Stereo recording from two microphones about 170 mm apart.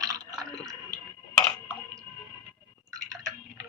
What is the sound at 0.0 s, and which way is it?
Drip, 20° right (ahead or behind).